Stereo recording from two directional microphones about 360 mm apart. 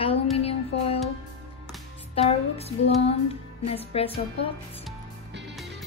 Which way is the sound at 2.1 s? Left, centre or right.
Centre.